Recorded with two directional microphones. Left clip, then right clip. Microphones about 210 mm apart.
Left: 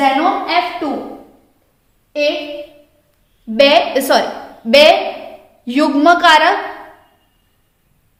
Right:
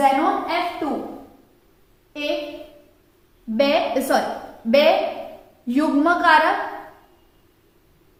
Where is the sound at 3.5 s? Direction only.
50° left (ahead or behind).